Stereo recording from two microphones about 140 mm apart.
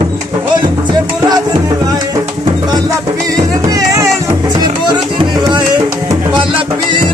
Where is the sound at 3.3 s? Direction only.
25° right (ahead or behind).